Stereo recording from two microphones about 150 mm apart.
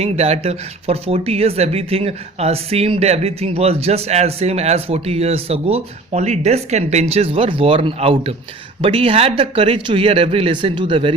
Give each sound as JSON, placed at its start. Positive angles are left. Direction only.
{"t": 0.0, "sound": "speech", "side_deg": -45}